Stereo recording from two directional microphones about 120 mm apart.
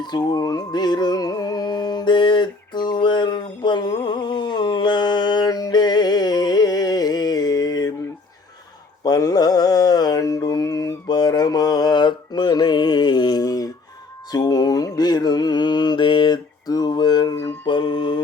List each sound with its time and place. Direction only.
0.0 s music: 35° left (ahead or behind)
9.0 s mantra: 30° left (ahead or behind)
17.7 s mantra: 40° left (ahead or behind)